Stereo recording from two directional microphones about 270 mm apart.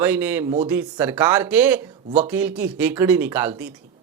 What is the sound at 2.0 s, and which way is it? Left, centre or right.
Speech, right.